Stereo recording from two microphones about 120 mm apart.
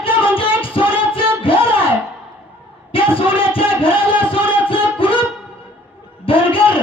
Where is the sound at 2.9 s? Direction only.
50° left (ahead or behind).